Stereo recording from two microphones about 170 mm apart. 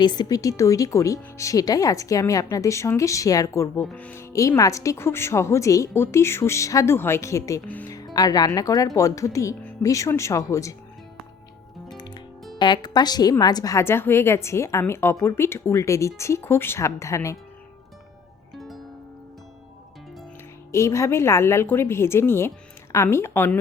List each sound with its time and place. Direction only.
0.0 s speech: 25° left (ahead or behind)
11.9 s music: 25° left (ahead or behind)
12.5 s speech: 25° left (ahead or behind)
18.5 s music: centre (ahead or behind)
20.7 s speech: 15° left (ahead or behind)